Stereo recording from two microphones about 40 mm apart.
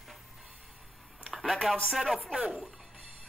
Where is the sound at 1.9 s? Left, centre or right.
Centre.